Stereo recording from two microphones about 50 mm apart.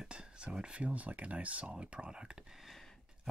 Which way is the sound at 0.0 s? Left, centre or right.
Centre.